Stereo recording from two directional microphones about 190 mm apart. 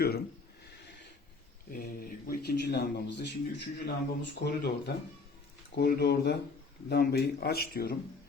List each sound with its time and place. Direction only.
1.7 s speech: 50° left (ahead or behind)
5.7 s speech: 55° left (ahead or behind)